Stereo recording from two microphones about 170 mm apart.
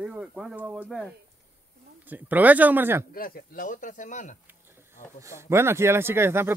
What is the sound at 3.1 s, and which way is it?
Speech, 60° left (ahead or behind).